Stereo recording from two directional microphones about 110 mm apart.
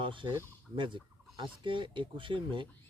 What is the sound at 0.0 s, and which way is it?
Speech, 50° right (ahead or behind).